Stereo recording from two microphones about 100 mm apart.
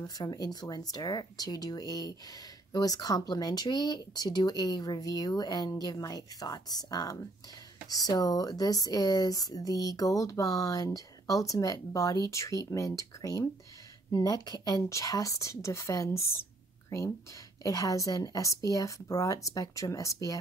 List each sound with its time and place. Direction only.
0.0 s speech: 45° left (ahead or behind); by 16.4 s 25° left (ahead or behind)
17.6 s speech: 35° left (ahead or behind)